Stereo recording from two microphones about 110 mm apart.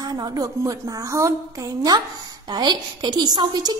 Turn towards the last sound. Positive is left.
turn(degrees=-40)  # may be behind; listen again after turning